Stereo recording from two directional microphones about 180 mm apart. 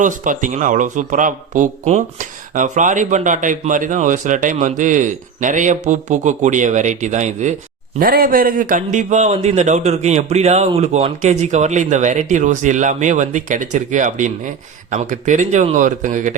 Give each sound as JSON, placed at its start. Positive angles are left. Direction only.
{"t": 0.0, "sound": "speech", "side_deg": -45}
{"t": 7.9, "sound": "a man's voice", "side_deg": -55}